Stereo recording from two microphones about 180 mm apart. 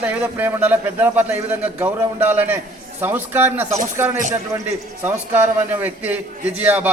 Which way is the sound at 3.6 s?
40° right (ahead or behind).